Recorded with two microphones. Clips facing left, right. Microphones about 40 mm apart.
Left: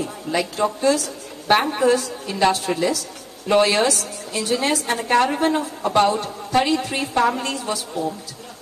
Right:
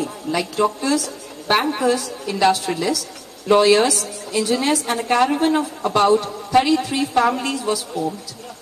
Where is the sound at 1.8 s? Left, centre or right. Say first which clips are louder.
Left 1 dB; left.